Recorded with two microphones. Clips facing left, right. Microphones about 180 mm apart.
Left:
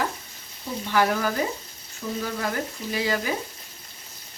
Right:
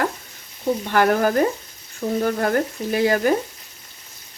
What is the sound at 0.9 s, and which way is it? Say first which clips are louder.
Speech: right 4 dB; 55° right (ahead or behind).